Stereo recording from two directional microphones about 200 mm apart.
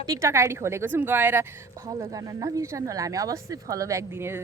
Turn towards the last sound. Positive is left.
turn(degrees=-15)  # may be behind; listen again after turning